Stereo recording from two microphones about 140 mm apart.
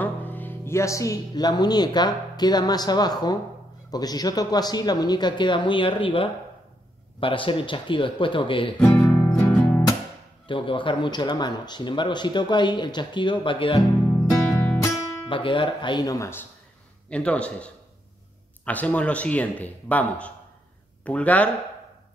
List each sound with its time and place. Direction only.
0.0 s speech: 10° left (ahead or behind); by 8.7 s 40° left (ahead or behind)
8.7 s music: 10° left (ahead or behind)
10.4 s speech: 35° left (ahead or behind)
14.0 s music: 10° left (ahead or behind)
15.2 s speech: 35° left (ahead or behind); by 16.4 s 20° left (ahead or behind)
17.1 s a man's voice: 10° left (ahead or behind)
18.7 s a man's voice: 10° left (ahead or behind)